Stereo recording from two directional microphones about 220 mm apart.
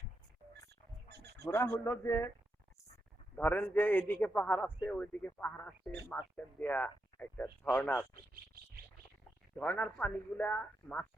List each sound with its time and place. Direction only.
1.0 s wild animals: 50° right (ahead or behind)
1.5 s a man's voice: 15° left (ahead or behind)
3.3 s a man's voice: 10° left (ahead or behind)
9.6 s a man's voice: 5° left (ahead or behind)